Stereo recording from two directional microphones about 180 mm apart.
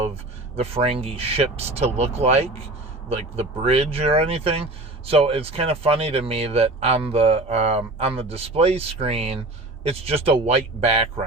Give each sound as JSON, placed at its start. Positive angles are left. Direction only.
{"t": 0.5, "sound": "speech", "side_deg": -35}